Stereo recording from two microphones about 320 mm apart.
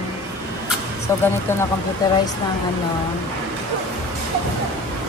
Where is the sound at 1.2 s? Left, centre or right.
Centre.